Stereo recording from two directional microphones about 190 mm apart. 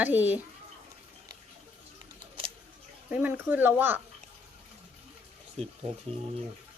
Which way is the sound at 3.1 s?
10° right (ahead or behind).